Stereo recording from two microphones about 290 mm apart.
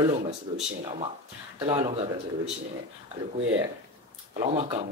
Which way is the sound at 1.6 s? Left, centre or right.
Centre.